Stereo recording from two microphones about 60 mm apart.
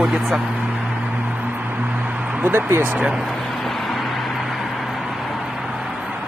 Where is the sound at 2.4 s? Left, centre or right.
Right.